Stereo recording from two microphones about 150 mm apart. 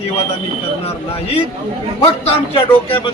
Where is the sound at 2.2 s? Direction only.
40° left (ahead or behind).